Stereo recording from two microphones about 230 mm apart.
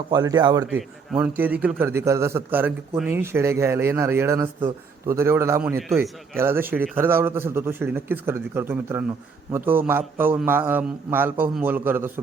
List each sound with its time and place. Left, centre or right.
0.1 s a man's voice: centre
1.2 s a man's voice: centre